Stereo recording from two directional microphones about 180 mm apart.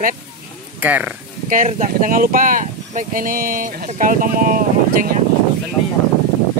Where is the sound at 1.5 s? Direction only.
45° right (ahead or behind).